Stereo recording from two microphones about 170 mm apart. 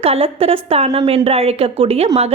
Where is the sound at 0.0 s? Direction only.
35° right (ahead or behind).